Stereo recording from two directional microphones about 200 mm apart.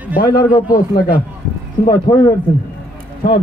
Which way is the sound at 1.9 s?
15° left (ahead or behind).